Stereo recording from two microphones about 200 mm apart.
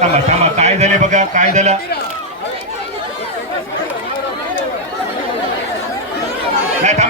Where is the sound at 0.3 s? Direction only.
35° right (ahead or behind).